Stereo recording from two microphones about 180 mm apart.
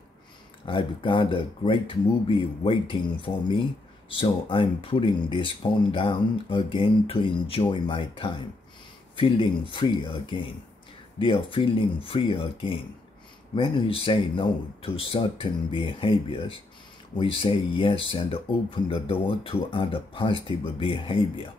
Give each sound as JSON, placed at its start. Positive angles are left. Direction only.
{"t": 0.7, "sound": "speech", "side_deg": 30}